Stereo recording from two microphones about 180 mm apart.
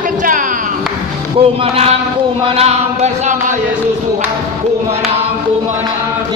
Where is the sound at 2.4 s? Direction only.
35° right (ahead or behind).